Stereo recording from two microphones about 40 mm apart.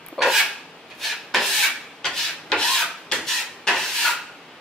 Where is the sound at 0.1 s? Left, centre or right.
Centre.